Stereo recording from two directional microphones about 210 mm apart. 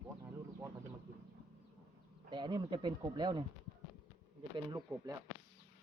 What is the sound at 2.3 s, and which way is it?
Speech, 20° right (ahead or behind).